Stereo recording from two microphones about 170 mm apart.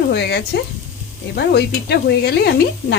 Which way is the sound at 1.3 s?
70° left (ahead or behind).